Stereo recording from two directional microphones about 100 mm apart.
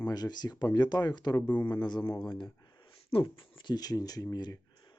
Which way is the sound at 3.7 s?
40° left (ahead or behind).